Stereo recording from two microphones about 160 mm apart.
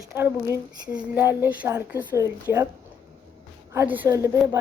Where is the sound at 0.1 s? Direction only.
15° right (ahead or behind).